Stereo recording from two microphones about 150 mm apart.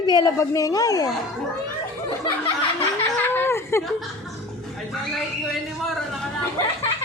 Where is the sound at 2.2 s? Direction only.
30° left (ahead or behind).